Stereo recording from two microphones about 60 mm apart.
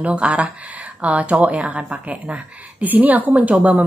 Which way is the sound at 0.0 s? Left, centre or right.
Right.